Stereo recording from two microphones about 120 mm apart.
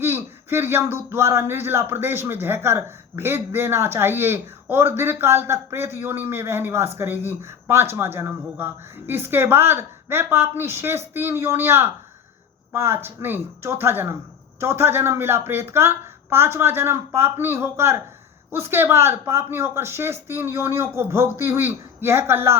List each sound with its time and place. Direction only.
0.0 s speech: 20° right (ahead or behind)